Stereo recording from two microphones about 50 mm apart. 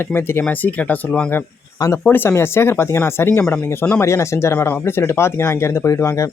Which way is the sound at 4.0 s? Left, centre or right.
Left.